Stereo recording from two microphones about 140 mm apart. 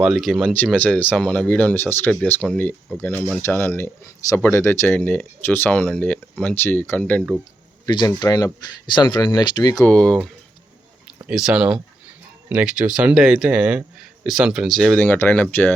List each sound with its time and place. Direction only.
0.0 s speech: centre (ahead or behind)
0.5 s speech: 10° left (ahead or behind)
7.9 s speech: 30° left (ahead or behind)
9.8 s speech: 5° left (ahead or behind)
11.3 s speech: 5° right (ahead or behind)